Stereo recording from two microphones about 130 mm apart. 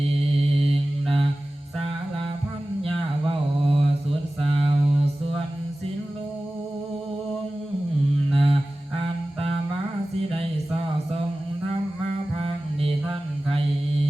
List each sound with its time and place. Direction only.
0.2 s mantra: 50° right (ahead or behind)
2.8 s mantra: 45° right (ahead or behind)
8.3 s mantra: 45° right (ahead or behind)
9.0 s humming: 45° right (ahead or behind)
12.4 s mantra: 45° right (ahead or behind)